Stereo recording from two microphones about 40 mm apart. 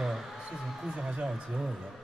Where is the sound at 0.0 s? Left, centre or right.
Centre.